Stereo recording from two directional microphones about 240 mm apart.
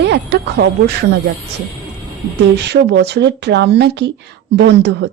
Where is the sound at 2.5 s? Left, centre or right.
Right.